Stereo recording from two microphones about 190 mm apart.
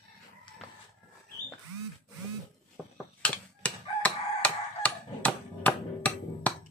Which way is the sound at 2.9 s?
5° left (ahead or behind).